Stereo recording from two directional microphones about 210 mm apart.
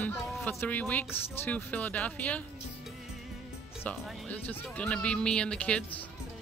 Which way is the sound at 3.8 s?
5° left (ahead or behind).